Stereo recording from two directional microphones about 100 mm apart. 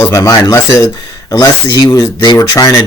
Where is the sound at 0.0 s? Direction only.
30° left (ahead or behind).